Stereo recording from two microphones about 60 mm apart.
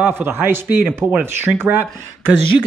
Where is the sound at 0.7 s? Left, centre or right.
Right.